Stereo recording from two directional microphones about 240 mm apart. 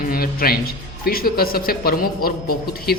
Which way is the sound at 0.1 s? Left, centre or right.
Left.